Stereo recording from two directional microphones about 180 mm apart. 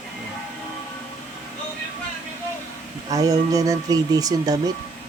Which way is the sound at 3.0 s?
20° right (ahead or behind).